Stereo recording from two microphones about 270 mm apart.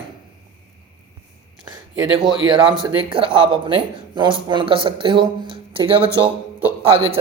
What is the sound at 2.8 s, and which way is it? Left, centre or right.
Speech, centre.